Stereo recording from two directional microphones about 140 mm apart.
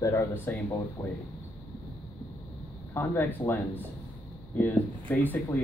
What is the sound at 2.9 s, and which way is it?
Speech, 15° left (ahead or behind).